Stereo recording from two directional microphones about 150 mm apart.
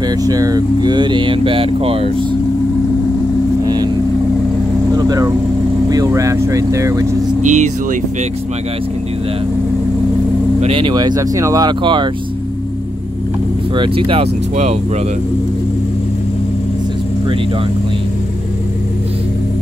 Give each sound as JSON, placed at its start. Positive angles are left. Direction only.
{"t": 0.2, "sound": "speech", "side_deg": -25}
{"t": 3.6, "sound": "vehicle", "side_deg": -25}
{"t": 4.9, "sound": "vehicle", "side_deg": -25}
{"t": 5.9, "sound": "speech", "side_deg": -20}
{"t": 7.4, "sound": "speech", "side_deg": -55}
{"t": 10.6, "sound": "speech", "side_deg": -35}
{"t": 13.7, "sound": "speech", "side_deg": -35}